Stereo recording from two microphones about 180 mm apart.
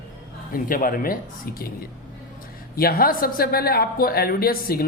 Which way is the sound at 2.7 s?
55° left (ahead or behind).